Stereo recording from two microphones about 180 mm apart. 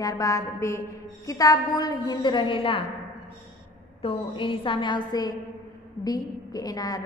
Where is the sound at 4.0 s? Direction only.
30° left (ahead or behind).